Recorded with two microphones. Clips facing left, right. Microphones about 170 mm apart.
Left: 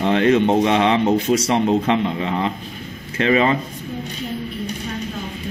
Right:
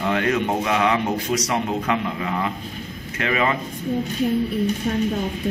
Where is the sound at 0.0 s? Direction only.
30° left (ahead or behind).